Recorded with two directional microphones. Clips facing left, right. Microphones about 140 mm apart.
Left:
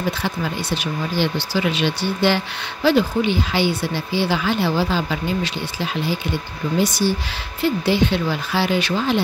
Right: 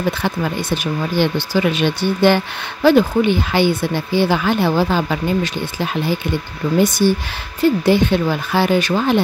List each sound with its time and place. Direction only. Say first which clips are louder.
0.2 s speech: right 4 dB; 55° right (ahead or behind)